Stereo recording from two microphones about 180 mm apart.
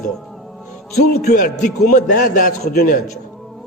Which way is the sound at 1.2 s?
50° left (ahead or behind).